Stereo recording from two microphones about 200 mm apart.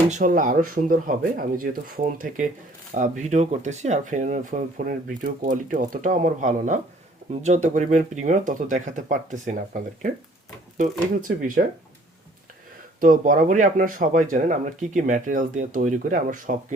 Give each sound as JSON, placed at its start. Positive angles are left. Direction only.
{"t": 0.1, "sound": "speech", "side_deg": -40}
{"t": 10.8, "sound": "speech", "side_deg": -40}
{"t": 13.0, "sound": "speech", "side_deg": -40}